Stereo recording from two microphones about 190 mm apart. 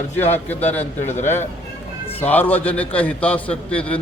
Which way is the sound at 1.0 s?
35° left (ahead or behind).